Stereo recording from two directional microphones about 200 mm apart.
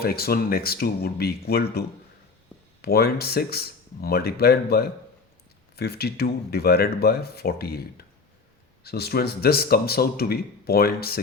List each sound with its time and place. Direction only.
0.0 s a man's voice: 50° left (ahead or behind)
2.8 s a man's voice: 50° left (ahead or behind)